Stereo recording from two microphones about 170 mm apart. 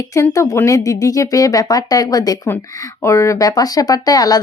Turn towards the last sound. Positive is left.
turn(degrees=20)  # may be behind; listen again after turning